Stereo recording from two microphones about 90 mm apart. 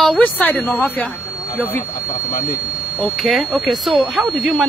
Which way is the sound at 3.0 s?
Centre (ahead or behind).